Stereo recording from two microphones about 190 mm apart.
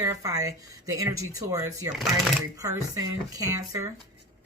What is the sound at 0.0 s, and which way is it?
Speech, 15° right (ahead or behind).